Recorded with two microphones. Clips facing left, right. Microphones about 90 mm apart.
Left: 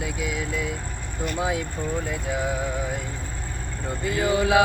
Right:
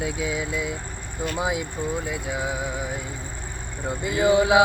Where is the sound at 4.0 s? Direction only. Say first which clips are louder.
Right 4 dB; 20° right (ahead or behind).